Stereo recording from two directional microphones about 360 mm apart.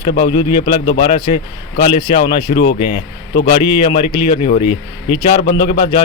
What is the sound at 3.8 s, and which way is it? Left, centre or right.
Speech, centre.